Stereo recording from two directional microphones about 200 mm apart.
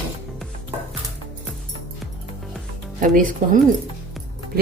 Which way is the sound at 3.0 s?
45° right (ahead or behind).